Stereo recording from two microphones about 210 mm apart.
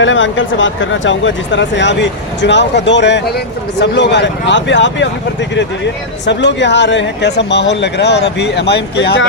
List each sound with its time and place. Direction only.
0.0 s speech: 65° left (ahead or behind)